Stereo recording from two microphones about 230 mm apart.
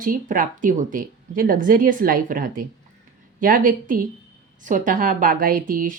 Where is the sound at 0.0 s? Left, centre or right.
Right.